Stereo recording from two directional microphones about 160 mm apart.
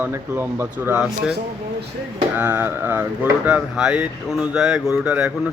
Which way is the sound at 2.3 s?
15° right (ahead or behind).